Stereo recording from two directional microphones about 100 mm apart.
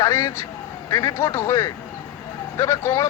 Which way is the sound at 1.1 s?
20° left (ahead or behind).